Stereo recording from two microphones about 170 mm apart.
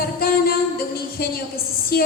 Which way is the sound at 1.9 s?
65° left (ahead or behind).